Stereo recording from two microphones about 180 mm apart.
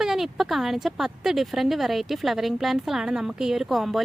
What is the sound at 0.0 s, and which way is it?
Speech, centre (ahead or behind).